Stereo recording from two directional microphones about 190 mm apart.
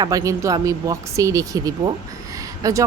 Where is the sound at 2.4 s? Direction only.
15° right (ahead or behind).